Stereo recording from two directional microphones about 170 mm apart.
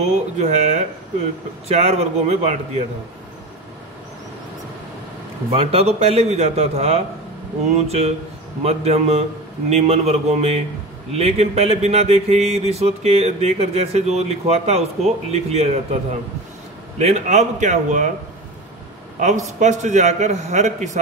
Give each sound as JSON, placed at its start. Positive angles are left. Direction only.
{"t": 0.0, "sound": "speech", "side_deg": -40}
{"t": 5.5, "sound": "a man's voice", "side_deg": -35}
{"t": 19.1, "sound": "a man's voice", "side_deg": -45}